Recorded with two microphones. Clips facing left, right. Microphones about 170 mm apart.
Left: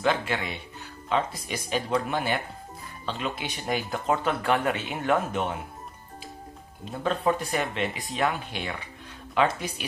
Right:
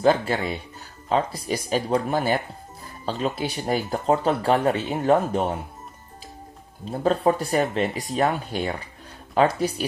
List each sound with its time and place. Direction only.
0.0 s speech: 35° right (ahead or behind)
6.8 s speech: 35° right (ahead or behind)